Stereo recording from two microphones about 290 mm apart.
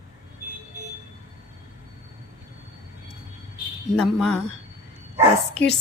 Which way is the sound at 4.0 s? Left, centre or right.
Centre.